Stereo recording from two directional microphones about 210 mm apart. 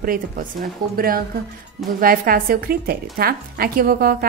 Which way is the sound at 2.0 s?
45° right (ahead or behind).